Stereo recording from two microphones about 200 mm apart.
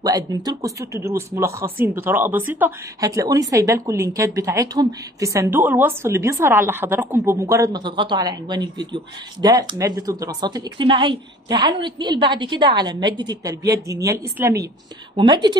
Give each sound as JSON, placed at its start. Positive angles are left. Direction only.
{"t": 0.0, "sound": "a woman's voice", "side_deg": -20}